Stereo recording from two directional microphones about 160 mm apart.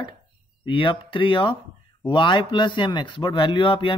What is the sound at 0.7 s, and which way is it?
Speech, 30° left (ahead or behind).